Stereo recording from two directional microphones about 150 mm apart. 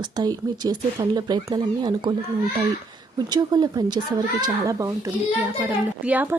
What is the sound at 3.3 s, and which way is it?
Speech, 25° right (ahead or behind).